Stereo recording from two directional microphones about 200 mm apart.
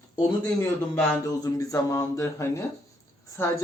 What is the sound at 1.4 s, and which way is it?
A man's voice, 15° left (ahead or behind).